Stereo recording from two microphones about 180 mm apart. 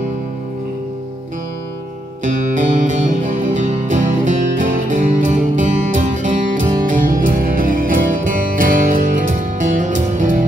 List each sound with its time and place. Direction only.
2.2 s music: 45° right (ahead or behind)